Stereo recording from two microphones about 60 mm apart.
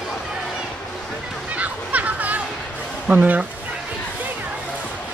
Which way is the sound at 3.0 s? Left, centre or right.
Right.